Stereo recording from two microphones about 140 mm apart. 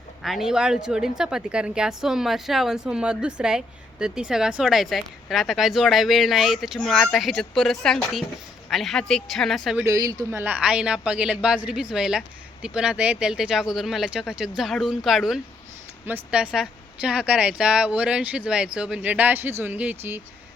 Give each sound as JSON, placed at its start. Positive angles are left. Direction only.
{"t": 0.2, "sound": "a woman's voice", "side_deg": 0}
{"t": 9.8, "sound": "a woman's voice", "side_deg": -25}
{"t": 10.4, "sound": "a woman's voice", "side_deg": -10}